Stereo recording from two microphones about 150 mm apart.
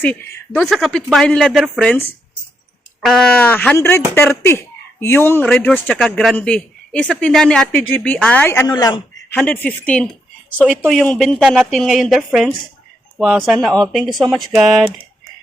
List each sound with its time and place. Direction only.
0.0 s a man's voice: 10° left (ahead or behind)
0.6 s a man's voice: centre (ahead or behind); by 9.0 s 25° left (ahead or behind)
9.3 s a man's voice: 10° left (ahead or behind)